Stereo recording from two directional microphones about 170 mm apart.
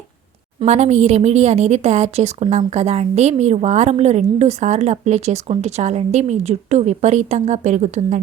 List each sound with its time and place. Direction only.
0.6 s a woman's voice: 40° right (ahead or behind)